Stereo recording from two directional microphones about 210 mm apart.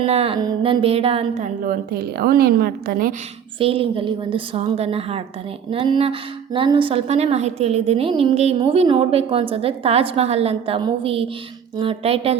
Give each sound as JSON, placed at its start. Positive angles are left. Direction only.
{"t": 0.0, "sound": "speech", "side_deg": -30}
{"t": 3.6, "sound": "a woman's voice", "side_deg": -25}